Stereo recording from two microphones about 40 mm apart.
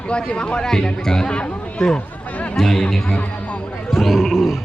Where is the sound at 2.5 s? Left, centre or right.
Centre.